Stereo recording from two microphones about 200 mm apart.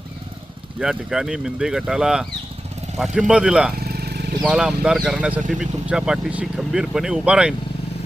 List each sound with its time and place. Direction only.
0.8 s speech: 5° right (ahead or behind)
3.8 s vehicle: 50° right (ahead or behind)
4.4 s speech: 5° right (ahead or behind)